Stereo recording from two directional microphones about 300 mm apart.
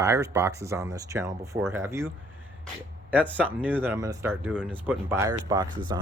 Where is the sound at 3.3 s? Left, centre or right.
Centre.